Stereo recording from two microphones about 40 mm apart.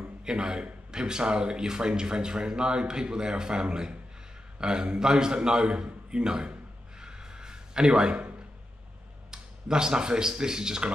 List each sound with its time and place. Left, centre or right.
0.2 s a man's voice: centre
7.0 s a sound: centre
9.3 s speech: centre